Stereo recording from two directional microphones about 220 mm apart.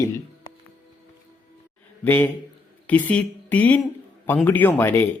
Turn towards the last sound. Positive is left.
turn(degrees=10)  # may be behind; listen again after turning